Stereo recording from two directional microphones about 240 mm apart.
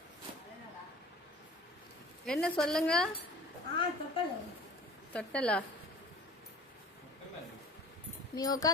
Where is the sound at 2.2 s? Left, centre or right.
Centre.